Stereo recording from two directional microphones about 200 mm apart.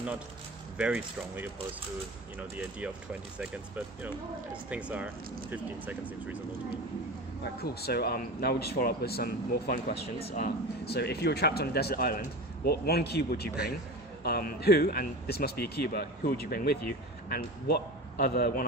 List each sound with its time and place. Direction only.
0.8 s speech: 5° right (ahead or behind)
7.4 s speech: 50° left (ahead or behind)
10.2 s speech: 30° left (ahead or behind)
10.4 s speech: 55° left (ahead or behind)